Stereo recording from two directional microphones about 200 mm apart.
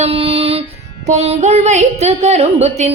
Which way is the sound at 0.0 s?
30° right (ahead or behind).